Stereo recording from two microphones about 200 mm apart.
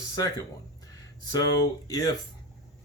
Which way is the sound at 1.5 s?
20° left (ahead or behind).